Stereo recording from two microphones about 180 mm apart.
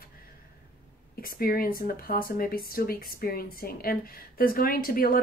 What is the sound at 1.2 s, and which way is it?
A woman's voice, 55° left (ahead or behind).